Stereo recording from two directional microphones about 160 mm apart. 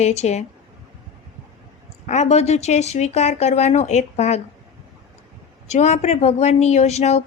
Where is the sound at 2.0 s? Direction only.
45° left (ahead or behind).